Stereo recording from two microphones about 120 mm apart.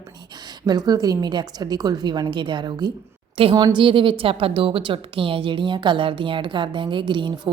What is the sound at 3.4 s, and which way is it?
A woman's voice, 50° right (ahead or behind).